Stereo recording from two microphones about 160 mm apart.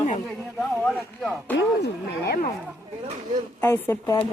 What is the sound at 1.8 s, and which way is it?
Speech, 80° left.